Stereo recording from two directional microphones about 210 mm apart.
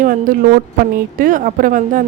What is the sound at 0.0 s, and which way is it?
A woman's voice, 40° right (ahead or behind).